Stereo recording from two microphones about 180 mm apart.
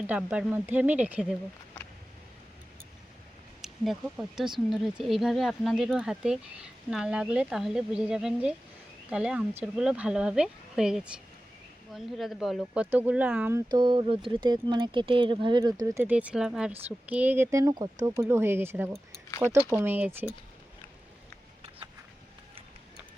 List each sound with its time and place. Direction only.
0.1 s speech: 5° right (ahead or behind)
3.6 s speech: centre (ahead or behind)
13.7 s speech: 25° right (ahead or behind)